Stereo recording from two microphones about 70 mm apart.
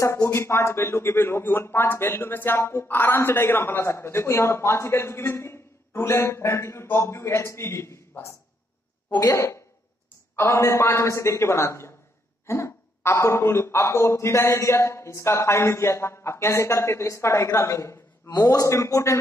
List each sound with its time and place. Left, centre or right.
0.0 s a man's voice: left
9.2 s a man's voice: left
18.5 s a man's voice: left